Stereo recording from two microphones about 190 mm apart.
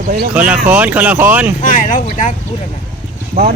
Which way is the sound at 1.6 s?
45° left (ahead or behind).